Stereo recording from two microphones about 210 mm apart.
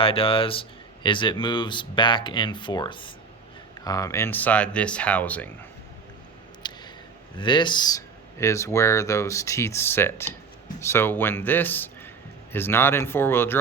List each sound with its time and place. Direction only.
0.0 s speech: 25° left (ahead or behind); by 5.5 s 5° left (ahead or behind)
6.6 s a sound: 20° left (ahead or behind)
7.3 s speech: 20° left (ahead or behind)